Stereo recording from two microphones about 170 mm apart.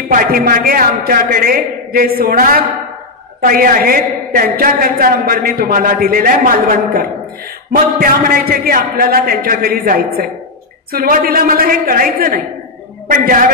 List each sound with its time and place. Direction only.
0.1 s a woman's voice: 60° right (ahead or behind)